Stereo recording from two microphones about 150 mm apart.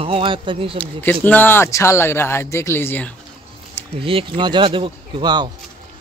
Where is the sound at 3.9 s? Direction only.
35° right (ahead or behind).